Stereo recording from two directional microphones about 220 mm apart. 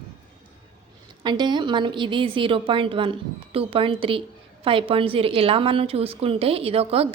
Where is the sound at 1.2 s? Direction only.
20° right (ahead or behind).